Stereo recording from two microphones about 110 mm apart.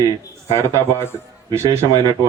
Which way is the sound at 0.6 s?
25° left (ahead or behind).